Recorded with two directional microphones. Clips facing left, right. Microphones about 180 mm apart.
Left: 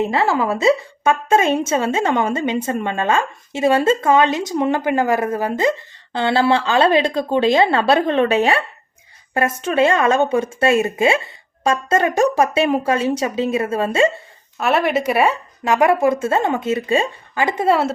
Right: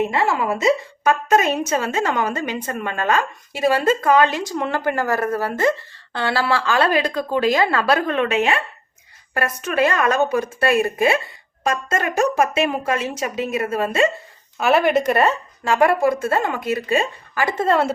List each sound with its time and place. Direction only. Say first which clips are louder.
0.1 s a woman's voice: left 2 dB; 35° left (ahead or behind)
14.6 s a woman's voice: right 1 dB; centre (ahead or behind)